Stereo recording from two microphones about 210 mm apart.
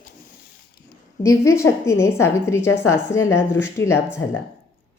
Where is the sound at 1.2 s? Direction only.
15° left (ahead or behind).